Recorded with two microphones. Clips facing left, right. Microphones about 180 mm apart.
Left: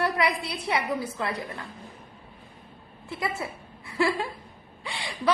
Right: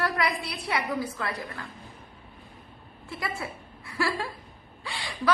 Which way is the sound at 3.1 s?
20° left (ahead or behind).